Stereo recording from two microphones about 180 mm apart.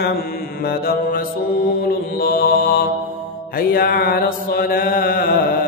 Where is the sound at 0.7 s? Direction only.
55° left (ahead or behind).